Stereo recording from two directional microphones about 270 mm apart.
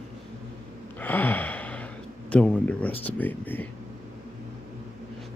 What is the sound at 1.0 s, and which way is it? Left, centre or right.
Speech, centre.